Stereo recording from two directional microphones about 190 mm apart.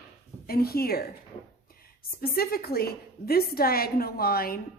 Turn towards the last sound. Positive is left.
turn(degrees=50)  # may be behind; listen again after turning